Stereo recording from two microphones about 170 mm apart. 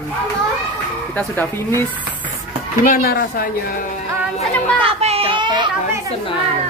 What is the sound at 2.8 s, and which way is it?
Speech, 60° left (ahead or behind).